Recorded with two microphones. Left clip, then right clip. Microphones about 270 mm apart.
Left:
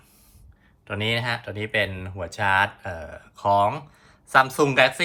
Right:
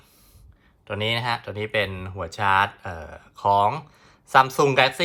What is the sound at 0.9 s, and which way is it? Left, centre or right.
Speech, centre.